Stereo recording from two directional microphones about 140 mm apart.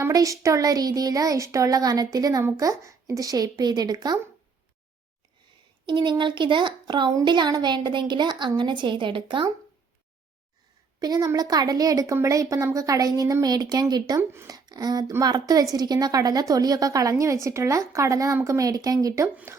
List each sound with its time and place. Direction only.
0.0 s a woman's voice: 25° right (ahead or behind)
5.8 s speech: 35° right (ahead or behind)
11.0 s a woman's voice: 30° right (ahead or behind)